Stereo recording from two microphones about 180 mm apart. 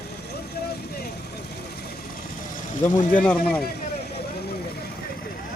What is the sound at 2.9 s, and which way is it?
Speech, 45° left (ahead or behind).